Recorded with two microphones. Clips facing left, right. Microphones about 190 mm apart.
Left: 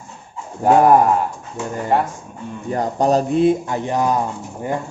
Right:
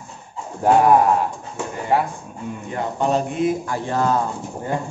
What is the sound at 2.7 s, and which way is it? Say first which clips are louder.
Speech: left 4 dB; 40° left (ahead or behind).